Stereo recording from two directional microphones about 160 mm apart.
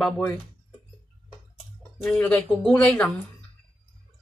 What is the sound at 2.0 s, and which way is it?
A woman's voice, 5° left (ahead or behind).